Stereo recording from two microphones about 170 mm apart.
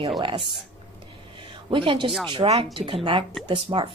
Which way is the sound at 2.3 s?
30° right (ahead or behind).